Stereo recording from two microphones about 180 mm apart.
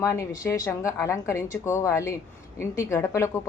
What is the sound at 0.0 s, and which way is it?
A woman's voice, 15° left (ahead or behind).